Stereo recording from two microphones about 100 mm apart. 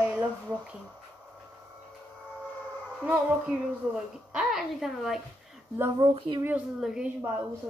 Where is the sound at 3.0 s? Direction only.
15° right (ahead or behind).